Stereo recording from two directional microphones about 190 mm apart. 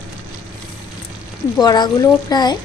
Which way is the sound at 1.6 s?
20° left (ahead or behind).